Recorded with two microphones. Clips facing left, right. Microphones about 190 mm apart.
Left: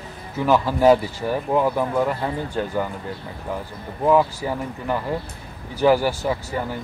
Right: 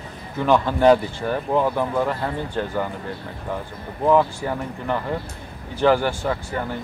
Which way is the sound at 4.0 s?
5° left (ahead or behind).